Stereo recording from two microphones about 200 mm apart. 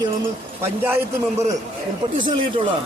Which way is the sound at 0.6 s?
10° right (ahead or behind).